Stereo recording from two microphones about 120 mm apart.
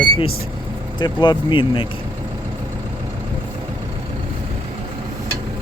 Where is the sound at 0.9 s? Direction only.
40° left (ahead or behind).